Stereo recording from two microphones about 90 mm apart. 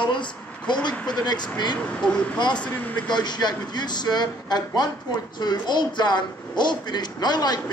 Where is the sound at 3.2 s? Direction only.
55° left (ahead or behind).